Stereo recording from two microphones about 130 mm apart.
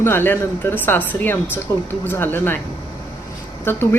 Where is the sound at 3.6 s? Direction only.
15° left (ahead or behind).